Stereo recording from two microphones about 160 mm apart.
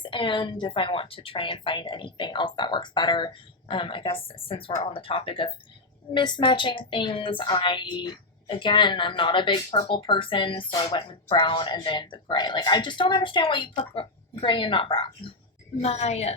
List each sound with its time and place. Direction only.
0.0 s a woman's voice: 30° left (ahead or behind)